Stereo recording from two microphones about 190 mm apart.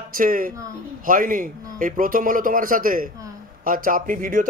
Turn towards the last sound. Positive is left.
turn(degrees=-45)  # may be behind; listen again after turning